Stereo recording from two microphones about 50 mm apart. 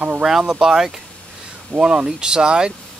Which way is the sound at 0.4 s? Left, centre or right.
Centre.